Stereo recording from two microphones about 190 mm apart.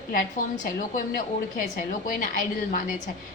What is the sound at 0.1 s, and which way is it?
A woman's voice, 45° left (ahead or behind).